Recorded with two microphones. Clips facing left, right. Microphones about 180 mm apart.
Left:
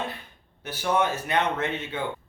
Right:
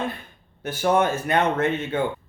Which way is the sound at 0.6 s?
50° right (ahead or behind).